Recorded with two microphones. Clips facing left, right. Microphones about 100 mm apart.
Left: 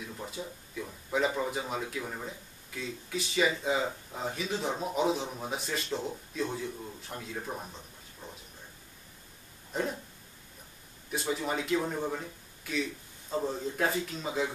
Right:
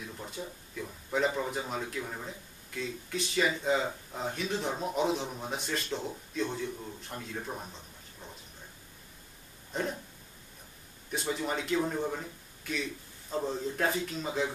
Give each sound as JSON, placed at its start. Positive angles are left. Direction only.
{"t": 0.2, "sound": "speech", "side_deg": 5}
{"t": 9.7, "sound": "a sound", "side_deg": 0}
{"t": 11.3, "sound": "speech", "side_deg": 0}